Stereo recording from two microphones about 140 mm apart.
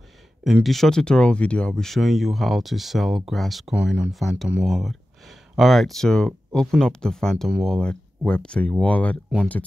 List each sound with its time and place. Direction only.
0.4 s speech: centre (ahead or behind)